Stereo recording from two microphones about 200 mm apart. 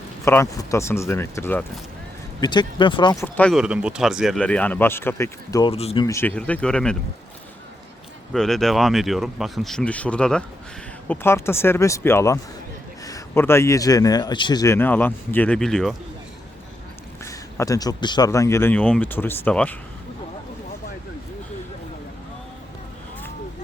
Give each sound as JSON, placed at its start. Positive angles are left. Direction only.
{"t": 0.3, "sound": "a man's voice", "side_deg": 15}
{"t": 2.4, "sound": "speech", "side_deg": 20}
{"t": 3.3, "sound": "a man's voice", "side_deg": 5}
{"t": 3.6, "sound": "speech", "side_deg": -5}
{"t": 5.7, "sound": "speech", "side_deg": 30}
{"t": 6.1, "sound": "speech", "side_deg": 10}
{"t": 8.3, "sound": "a man's voice", "side_deg": 0}
{"t": 17.2, "sound": "a man's voice", "side_deg": 15}